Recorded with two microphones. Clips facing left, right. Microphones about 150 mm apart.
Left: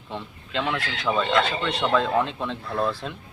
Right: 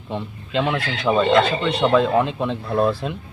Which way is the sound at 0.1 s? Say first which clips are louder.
Right 6 dB; 20° right (ahead or behind).